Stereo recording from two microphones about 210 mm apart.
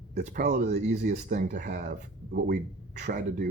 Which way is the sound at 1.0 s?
45° right (ahead or behind).